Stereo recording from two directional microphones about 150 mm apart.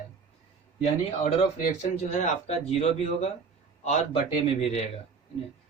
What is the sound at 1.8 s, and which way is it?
Speech, 45° left (ahead or behind).